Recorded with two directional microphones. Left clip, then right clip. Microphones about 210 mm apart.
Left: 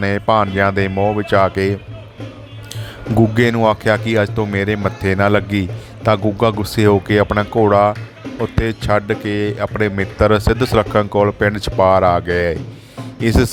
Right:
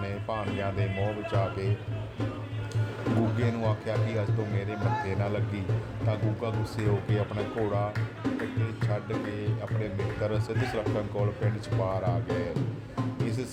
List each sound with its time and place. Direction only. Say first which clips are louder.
0.0 s speech: left 18 dB; 55° left (ahead or behind)
3.3 s speech: left 17 dB; 55° left (ahead or behind)